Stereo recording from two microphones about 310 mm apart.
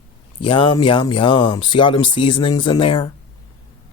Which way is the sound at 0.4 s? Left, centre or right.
Centre.